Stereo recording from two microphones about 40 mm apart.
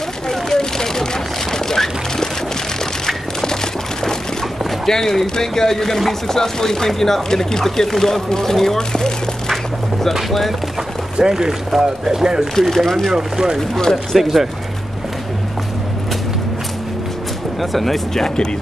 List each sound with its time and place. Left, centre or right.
0.3 s a sound: centre
4.6 s speech: centre
11.1 s speech: centre
12.5 s speech: centre
13.1 s speech: centre
13.6 s speech: centre
14.1 s speech: centre
17.6 s speech: centre